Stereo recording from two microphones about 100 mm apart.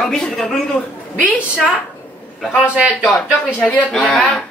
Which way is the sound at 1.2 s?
10° right (ahead or behind).